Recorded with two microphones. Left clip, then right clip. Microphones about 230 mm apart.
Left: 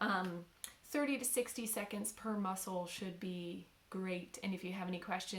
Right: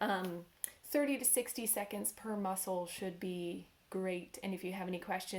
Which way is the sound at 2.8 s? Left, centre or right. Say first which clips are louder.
Right 3 dB; centre.